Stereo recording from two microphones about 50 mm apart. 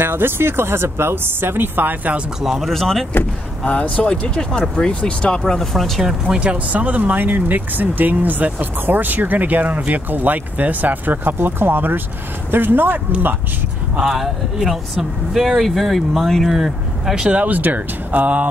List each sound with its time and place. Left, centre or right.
0.0 s speech: right
2.4 s speech: centre
3.6 s speech: left
3.9 s speech: centre
6.0 s speech: centre; by 13.0 s right
13.9 s speech: centre
17.1 s speech: centre
17.4 s speech: right